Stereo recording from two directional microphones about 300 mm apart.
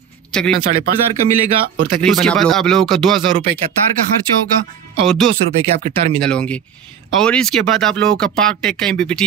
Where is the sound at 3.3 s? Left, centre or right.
Right.